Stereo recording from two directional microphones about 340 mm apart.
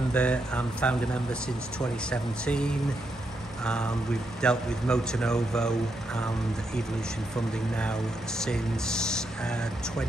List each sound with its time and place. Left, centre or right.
0.1 s speech: centre
2.0 s speech: centre
8.5 s speech: centre